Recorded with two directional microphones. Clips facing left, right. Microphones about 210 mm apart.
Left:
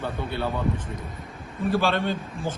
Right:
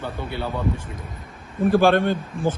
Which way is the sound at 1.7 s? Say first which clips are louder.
Right 7 dB; 55° right (ahead or behind).